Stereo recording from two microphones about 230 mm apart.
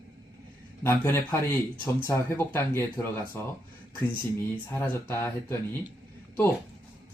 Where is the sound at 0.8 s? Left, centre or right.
Centre.